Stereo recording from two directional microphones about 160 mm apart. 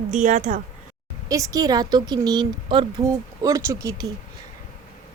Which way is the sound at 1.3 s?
20° right (ahead or behind).